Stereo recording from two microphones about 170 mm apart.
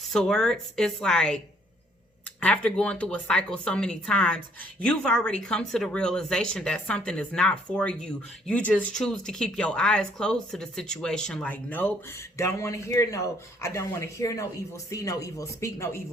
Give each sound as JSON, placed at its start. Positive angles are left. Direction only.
{"t": 0.1, "sound": "speech", "side_deg": 5}
{"t": 2.4, "sound": "speech", "side_deg": 5}